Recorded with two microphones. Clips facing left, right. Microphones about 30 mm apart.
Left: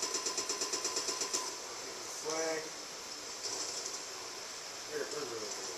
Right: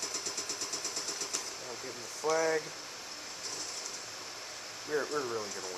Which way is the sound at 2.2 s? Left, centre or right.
Right.